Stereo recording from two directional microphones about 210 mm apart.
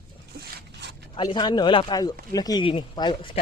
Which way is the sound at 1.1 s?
20° left (ahead or behind).